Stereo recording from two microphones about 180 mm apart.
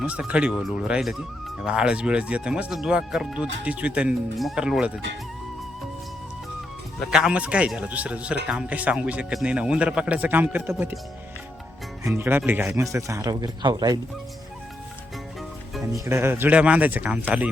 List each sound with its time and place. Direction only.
0.0 s speech: 5° right (ahead or behind)
7.1 s a man's voice: 5° right (ahead or behind)
12.1 s a man's voice: 10° right (ahead or behind)
15.8 s a man's voice: 15° right (ahead or behind)